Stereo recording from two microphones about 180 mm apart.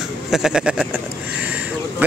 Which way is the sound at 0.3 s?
5° right (ahead or behind).